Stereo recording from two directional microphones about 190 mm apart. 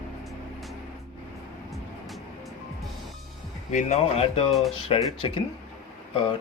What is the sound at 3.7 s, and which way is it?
Speech, 40° left (ahead or behind).